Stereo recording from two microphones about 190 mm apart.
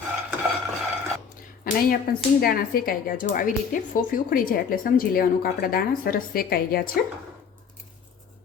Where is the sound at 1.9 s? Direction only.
50° left (ahead or behind).